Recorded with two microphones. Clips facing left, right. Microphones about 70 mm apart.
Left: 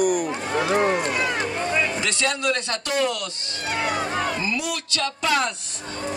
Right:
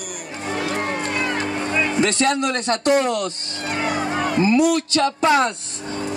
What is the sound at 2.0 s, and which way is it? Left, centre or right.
Speech, right.